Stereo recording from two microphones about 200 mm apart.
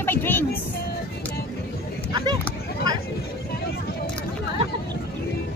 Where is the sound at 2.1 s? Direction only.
20° right (ahead or behind).